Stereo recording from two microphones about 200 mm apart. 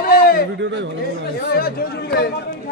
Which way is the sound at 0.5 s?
65° right (ahead or behind).